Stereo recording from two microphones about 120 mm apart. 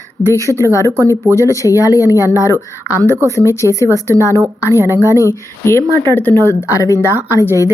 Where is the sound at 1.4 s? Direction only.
25° left (ahead or behind).